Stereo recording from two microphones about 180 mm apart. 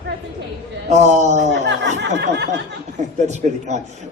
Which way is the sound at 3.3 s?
40° right (ahead or behind).